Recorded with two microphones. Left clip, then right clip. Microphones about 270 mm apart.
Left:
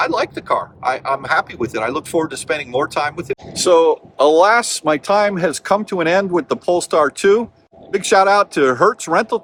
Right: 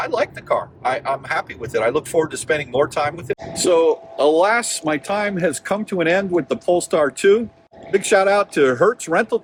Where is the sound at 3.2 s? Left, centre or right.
Centre.